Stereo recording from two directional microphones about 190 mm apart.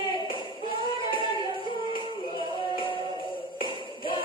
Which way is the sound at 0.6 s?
25° left (ahead or behind).